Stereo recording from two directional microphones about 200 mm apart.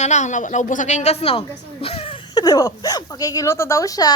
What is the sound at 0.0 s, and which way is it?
A woman's voice, 35° left (ahead or behind).